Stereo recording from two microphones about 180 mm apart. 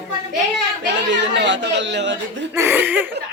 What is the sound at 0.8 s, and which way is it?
A man's voice, 80° right.